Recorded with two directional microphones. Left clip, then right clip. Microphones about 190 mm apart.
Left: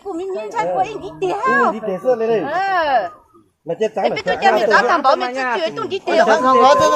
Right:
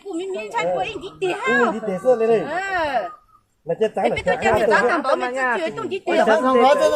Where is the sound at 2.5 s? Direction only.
5° right (ahead or behind).